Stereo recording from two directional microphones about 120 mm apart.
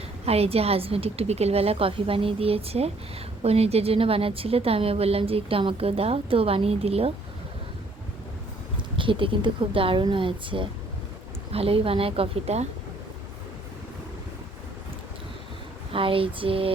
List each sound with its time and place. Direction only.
0.3 s a woman's voice: 55° right (ahead or behind)
9.0 s a woman's voice: 45° right (ahead or behind)
15.9 s a woman's voice: 50° right (ahead or behind)